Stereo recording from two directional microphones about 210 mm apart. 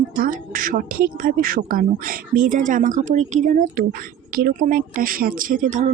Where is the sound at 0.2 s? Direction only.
40° right (ahead or behind).